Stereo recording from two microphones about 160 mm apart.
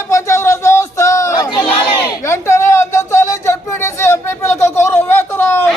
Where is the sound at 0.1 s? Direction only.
15° left (ahead or behind).